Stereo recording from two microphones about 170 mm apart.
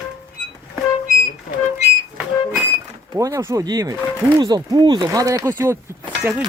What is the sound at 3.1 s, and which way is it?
Speech, 15° right (ahead or behind).